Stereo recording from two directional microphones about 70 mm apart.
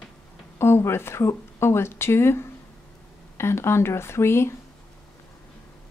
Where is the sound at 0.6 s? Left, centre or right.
Left.